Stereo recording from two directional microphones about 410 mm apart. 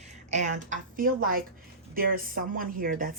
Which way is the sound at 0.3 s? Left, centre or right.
Centre.